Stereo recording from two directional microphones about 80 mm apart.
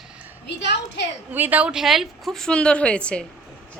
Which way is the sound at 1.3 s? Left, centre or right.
Right.